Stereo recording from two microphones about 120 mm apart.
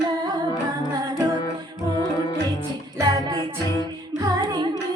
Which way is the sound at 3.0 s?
30° right (ahead or behind).